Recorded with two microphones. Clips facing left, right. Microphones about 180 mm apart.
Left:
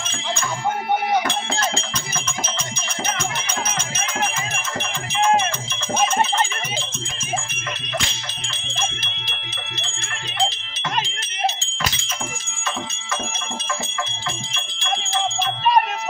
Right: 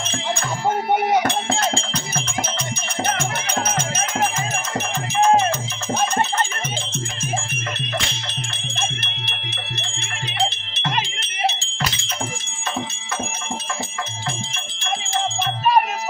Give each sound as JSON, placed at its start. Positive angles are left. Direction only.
{"t": 5.1, "sound": "music", "side_deg": -40}
{"t": 8.5, "sound": "music", "side_deg": -65}
{"t": 10.5, "sound": "a sound", "side_deg": -60}